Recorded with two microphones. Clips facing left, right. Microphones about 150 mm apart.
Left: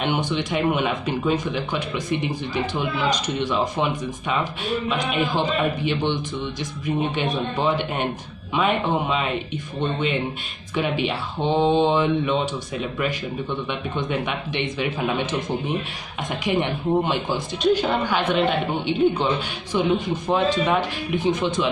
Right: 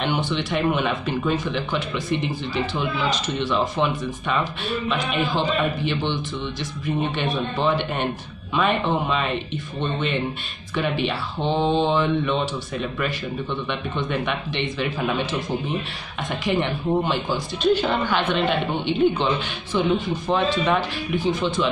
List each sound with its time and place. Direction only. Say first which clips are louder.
0.0 s speech: left 1 dB; 15° left (ahead or behind)
7.2 s speech: even; 20° left (ahead or behind)
10.8 s speech: even; 15° left (ahead or behind)
16.3 s speech: even; 20° left (ahead or behind)